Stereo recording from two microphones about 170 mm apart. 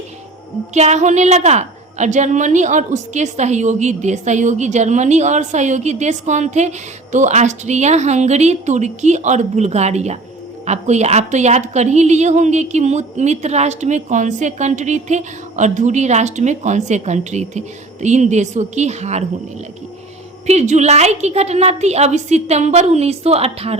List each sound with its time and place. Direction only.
0.7 s a woman's voice: 40° right (ahead or behind)
20.5 s a woman's voice: 40° right (ahead or behind)